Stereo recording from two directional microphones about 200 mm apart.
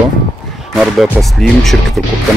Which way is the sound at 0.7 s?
Centre (ahead or behind).